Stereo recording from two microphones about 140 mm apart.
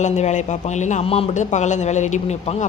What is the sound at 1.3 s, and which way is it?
Speech, 60° left (ahead or behind).